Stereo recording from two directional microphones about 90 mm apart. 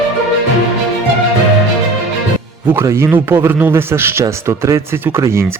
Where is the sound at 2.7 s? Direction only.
30° right (ahead or behind).